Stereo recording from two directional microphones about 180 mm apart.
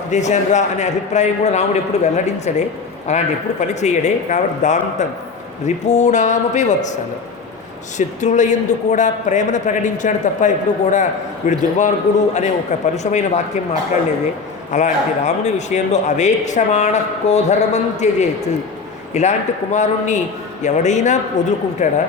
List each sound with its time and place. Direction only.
0.1 s a man's voice: 40° left (ahead or behind)
14.7 s a man's voice: 40° left (ahead or behind)